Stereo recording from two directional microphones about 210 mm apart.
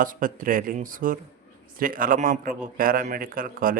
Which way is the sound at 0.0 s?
40° right (ahead or behind).